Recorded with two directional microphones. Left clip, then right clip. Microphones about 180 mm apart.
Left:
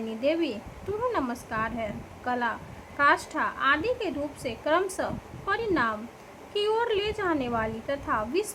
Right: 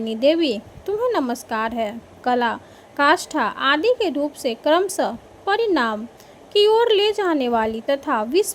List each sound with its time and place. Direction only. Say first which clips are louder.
0.2 s a woman's voice: right 9 dB; 35° right (ahead or behind)